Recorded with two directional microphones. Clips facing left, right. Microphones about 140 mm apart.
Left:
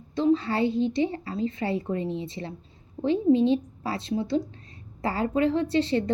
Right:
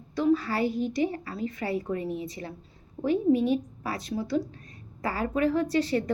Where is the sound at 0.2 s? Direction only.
25° left (ahead or behind).